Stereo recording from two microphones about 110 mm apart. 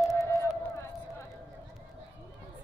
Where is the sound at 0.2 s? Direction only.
25° left (ahead or behind).